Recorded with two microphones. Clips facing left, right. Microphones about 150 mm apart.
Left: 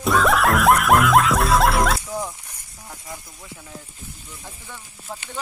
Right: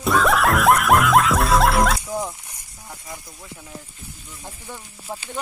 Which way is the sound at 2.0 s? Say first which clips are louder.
Right 2 dB; 15° right (ahead or behind).